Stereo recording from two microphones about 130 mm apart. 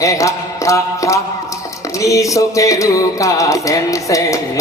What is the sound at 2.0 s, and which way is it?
Music, 25° left (ahead or behind).